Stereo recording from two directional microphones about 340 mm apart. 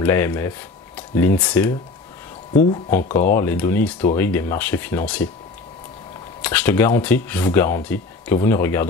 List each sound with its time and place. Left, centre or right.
0.0 s speech: centre
2.5 s speech: left
3.3 s speech: centre
6.4 s speech: centre